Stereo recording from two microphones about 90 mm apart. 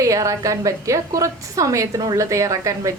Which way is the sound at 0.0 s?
35° right (ahead or behind).